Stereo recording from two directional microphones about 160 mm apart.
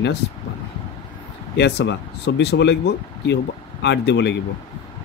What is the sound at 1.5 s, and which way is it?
Speech, 90° left.